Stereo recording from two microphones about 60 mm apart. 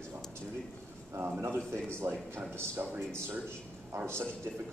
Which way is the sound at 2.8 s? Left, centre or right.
Centre.